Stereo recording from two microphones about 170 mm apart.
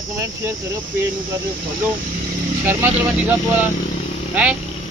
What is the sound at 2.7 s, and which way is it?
Speech, 15° right (ahead or behind).